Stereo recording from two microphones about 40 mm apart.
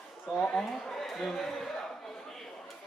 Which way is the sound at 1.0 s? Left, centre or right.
Centre.